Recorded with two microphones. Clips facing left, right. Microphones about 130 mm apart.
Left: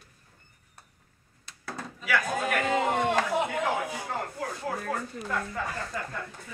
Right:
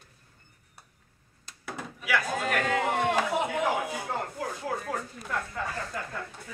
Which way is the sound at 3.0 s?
5° right (ahead or behind).